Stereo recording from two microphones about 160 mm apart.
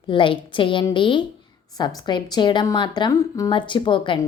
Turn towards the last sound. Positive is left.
turn(degrees=30)  # may be behind; listen again after turning